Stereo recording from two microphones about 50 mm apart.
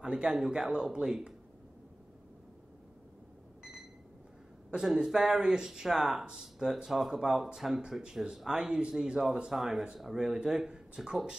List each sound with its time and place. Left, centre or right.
0.0 s speech: centre
4.7 s speech: centre
9.2 s speech: centre
9.5 s speech: centre